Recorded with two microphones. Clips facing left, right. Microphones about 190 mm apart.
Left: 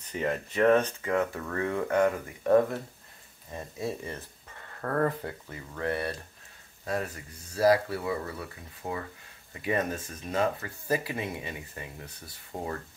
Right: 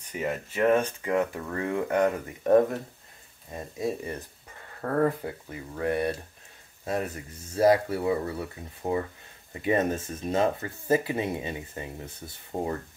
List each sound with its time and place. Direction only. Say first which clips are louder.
0.1 s speech: even; 10° right (ahead or behind)
6.8 s a sound: right 2 dB; 25° right (ahead or behind)
7.5 s speech: right 2 dB; 25° right (ahead or behind)